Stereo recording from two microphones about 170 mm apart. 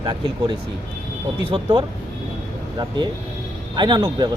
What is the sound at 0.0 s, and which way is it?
Speech, 25° right (ahead or behind).